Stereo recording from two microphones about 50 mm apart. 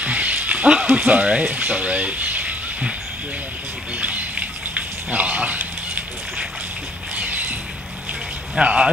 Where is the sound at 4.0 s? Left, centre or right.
Right.